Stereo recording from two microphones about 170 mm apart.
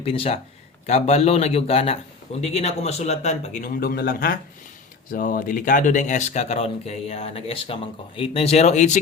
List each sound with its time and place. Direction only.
0.0 s a man's voice: 35° left (ahead or behind)